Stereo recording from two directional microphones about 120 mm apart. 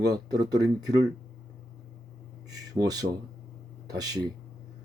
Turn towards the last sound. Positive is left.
turn(degrees=-35)  # may be behind; listen again after turning